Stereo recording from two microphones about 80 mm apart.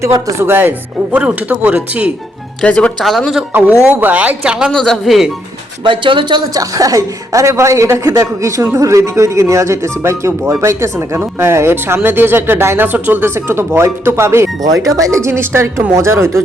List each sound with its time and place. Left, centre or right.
0.0 s speech: right
1.1 s speech: centre
2.6 s speech: centre
3.0 s speech: centre
3.8 s speech: right
4.7 s speech: centre
5.8 s a woman's voice: right
6.5 s speech: right
14.6 s speech: right